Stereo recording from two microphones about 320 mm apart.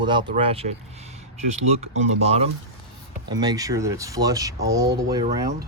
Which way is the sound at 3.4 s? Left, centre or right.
Centre.